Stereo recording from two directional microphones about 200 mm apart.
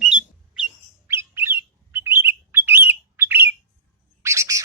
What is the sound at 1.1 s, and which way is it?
Bird, 10° right (ahead or behind).